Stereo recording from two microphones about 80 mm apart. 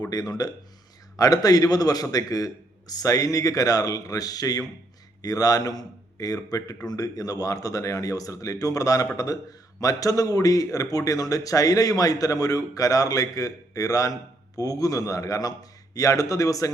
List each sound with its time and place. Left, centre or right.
0.1 s a man's voice: left